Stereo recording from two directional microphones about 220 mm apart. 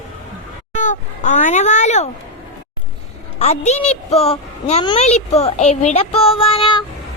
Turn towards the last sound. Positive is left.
turn(degrees=25)  # may be behind; listen again after turning